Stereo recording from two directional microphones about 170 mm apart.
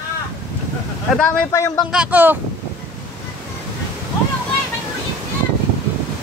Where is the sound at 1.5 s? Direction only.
20° left (ahead or behind).